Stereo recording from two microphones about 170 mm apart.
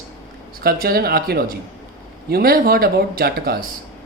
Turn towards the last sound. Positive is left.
turn(degrees=-60)  # may be behind; listen again after turning